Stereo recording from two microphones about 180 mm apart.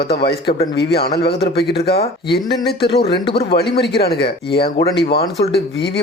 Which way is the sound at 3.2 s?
30° left (ahead or behind).